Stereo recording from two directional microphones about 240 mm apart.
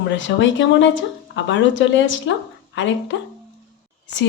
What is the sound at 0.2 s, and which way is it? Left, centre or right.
A woman's voice, left.